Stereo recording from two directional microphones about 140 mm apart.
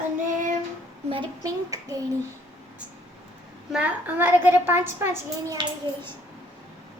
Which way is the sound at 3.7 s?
10° right (ahead or behind).